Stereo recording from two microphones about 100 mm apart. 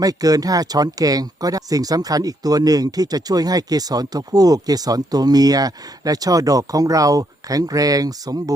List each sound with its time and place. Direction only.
0.0 s speech: 40° right (ahead or behind)